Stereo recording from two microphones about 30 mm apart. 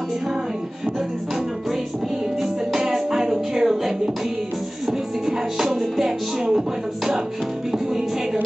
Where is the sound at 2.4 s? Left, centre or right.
Centre.